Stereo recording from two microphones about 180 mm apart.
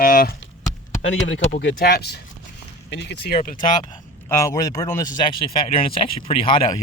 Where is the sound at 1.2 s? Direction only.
80° left; by 2.2 s 60° left (ahead or behind).